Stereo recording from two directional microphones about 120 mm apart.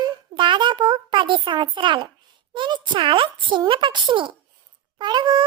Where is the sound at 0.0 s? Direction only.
40° right (ahead or behind).